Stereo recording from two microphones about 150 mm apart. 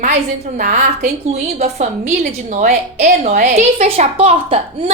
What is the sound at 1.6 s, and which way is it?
A woman's voice, 50° right (ahead or behind).